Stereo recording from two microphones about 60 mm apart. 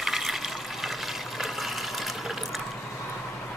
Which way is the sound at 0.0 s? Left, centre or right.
Centre.